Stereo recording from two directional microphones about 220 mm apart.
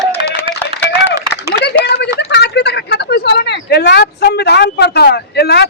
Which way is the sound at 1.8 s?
50° left (ahead or behind).